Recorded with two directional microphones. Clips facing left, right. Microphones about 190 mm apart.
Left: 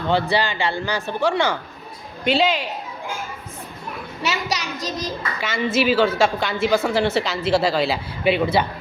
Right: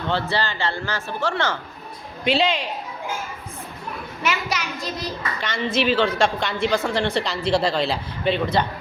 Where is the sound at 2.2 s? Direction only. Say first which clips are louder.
Left 1 dB; centre (ahead or behind).